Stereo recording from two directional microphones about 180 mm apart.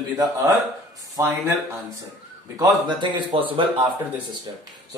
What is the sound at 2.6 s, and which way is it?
Speech, 25° right (ahead or behind).